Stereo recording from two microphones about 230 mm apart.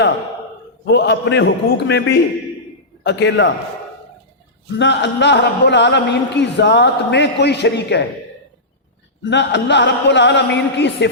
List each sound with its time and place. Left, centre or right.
0.9 s a man's voice: left
4.8 s a man's voice: left
9.3 s a man's voice: left